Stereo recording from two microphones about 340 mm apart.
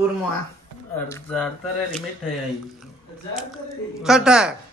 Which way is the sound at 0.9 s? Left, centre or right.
Centre.